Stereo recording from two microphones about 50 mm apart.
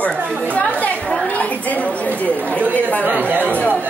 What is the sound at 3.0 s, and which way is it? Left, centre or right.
Speech, right.